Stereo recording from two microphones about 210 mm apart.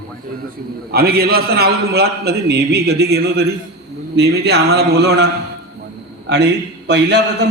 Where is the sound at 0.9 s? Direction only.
45° right (ahead or behind).